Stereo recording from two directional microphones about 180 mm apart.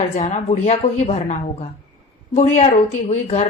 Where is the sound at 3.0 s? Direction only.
35° left (ahead or behind).